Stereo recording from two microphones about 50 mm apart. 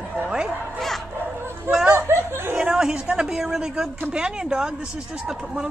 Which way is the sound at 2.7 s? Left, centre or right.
Centre.